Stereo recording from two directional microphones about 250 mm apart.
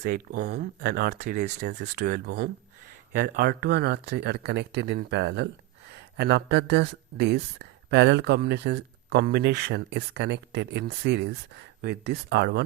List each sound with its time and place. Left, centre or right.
0.0 s speech: right